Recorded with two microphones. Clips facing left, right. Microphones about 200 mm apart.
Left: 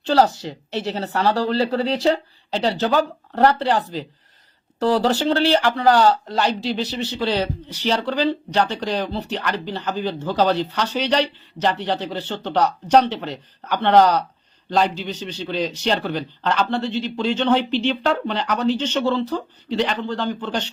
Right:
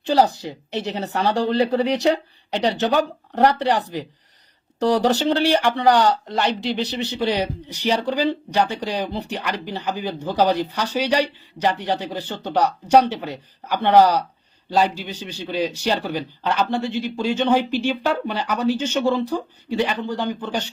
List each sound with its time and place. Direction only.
0.0 s speech: 15° right (ahead or behind)